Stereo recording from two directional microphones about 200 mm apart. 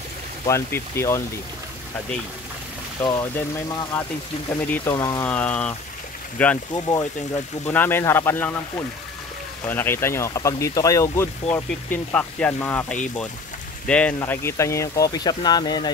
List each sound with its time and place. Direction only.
0.5 s speech: 15° left (ahead or behind)
3.0 s speech: 15° left (ahead or behind)
5.3 s speech: 5° left (ahead or behind)
6.7 s speech: 15° left (ahead or behind)